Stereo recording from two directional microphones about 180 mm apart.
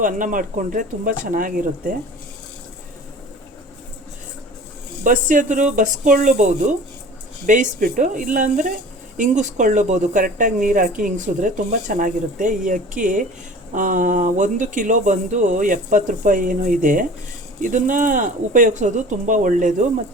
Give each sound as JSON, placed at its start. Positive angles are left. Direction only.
{"t": 0.0, "sound": "speech", "side_deg": -45}
{"t": 5.0, "sound": "speech", "side_deg": -45}